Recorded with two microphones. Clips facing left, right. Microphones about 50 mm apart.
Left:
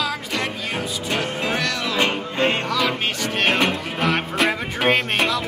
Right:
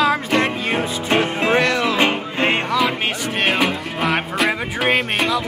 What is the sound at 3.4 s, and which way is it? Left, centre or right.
Music, centre.